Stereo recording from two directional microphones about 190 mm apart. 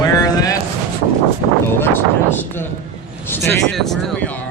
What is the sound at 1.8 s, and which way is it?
Speech, 10° left (ahead or behind).